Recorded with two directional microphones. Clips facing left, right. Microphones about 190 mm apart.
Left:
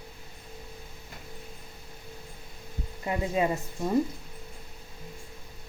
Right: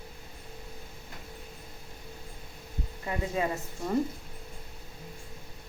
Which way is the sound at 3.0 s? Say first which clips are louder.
Left 4 dB; 20° left (ahead or behind).